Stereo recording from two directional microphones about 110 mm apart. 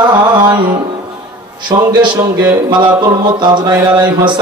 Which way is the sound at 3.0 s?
40° right (ahead or behind).